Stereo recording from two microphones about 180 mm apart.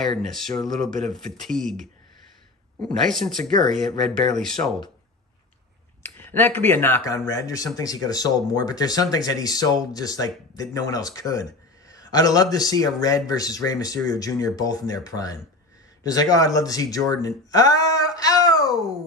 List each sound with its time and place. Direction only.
0.2 s speech: centre (ahead or behind)
3.0 s speech: centre (ahead or behind)
6.0 s speech: 10° left (ahead or behind)